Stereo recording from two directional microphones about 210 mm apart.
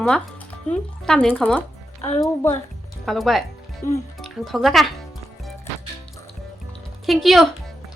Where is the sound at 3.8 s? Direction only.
10° left (ahead or behind).